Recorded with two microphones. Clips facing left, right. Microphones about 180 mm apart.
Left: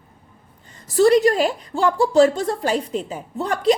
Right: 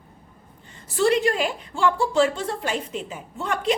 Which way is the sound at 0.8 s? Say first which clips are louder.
Left 6 dB; 40° left (ahead or behind).